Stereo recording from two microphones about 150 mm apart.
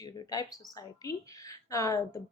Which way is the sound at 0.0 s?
25° left (ahead or behind).